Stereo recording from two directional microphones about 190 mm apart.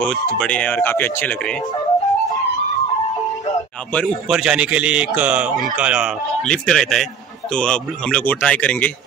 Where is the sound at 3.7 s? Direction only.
5° left (ahead or behind).